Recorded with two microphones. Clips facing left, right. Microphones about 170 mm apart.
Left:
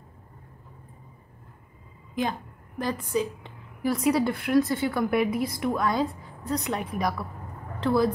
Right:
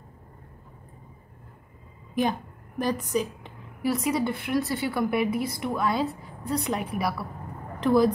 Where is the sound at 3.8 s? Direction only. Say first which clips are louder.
Left 2 dB; centre (ahead or behind).